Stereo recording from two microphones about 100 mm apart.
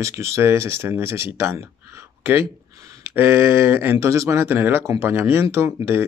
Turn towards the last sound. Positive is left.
turn(degrees=-25)  # may be behind; listen again after turning